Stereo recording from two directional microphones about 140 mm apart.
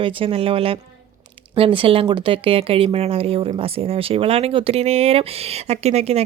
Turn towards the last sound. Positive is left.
turn(degrees=-50)  # may be behind; listen again after turning